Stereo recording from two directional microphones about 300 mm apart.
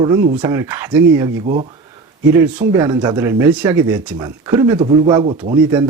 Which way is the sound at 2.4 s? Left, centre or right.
Centre.